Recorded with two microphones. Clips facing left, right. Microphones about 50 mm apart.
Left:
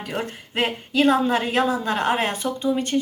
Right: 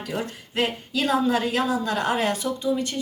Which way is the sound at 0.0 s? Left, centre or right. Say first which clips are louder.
Left 1 dB; left.